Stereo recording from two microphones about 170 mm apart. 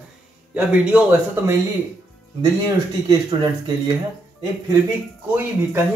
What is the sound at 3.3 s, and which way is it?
Speech, 20° right (ahead or behind).